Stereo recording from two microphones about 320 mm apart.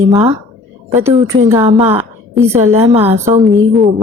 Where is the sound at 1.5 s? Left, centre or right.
Centre.